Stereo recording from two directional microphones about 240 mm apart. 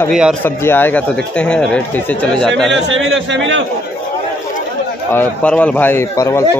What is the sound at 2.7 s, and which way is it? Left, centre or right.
Speech, right.